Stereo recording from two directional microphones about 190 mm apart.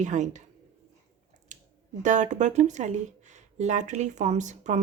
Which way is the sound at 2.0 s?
40° right (ahead or behind).